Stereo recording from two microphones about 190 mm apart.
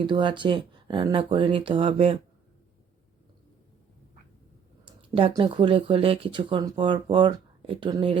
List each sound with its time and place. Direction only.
0.0 s speech: 25° right (ahead or behind)
5.1 s speech: 25° right (ahead or behind)